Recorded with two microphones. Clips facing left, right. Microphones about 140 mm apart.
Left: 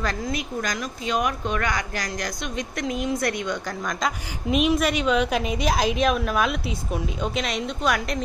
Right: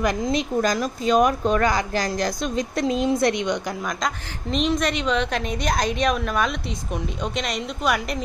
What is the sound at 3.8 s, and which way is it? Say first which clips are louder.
A woman's voice: even; centre (ahead or behind).